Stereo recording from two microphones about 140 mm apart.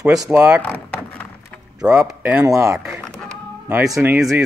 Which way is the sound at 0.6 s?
10° left (ahead or behind).